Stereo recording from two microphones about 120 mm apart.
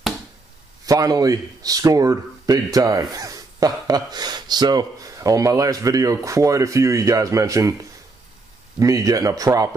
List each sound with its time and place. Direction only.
0.8 s a man's voice: 30° right (ahead or behind)
8.7 s a man's voice: 30° right (ahead or behind)